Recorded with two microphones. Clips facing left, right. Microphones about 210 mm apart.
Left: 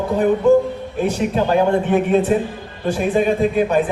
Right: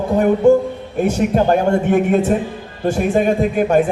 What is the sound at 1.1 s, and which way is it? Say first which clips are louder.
A man's voice: right 4 dB; 45° right (ahead or behind).